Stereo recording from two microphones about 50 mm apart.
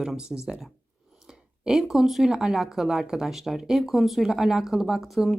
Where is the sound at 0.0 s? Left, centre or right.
Centre.